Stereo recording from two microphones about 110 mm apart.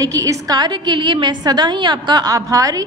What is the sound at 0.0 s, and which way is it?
A woman's voice, 30° right (ahead or behind).